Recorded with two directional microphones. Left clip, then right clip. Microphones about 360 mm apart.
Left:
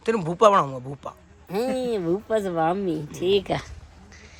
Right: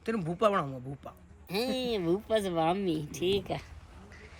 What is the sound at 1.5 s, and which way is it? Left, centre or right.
A man's voice, centre.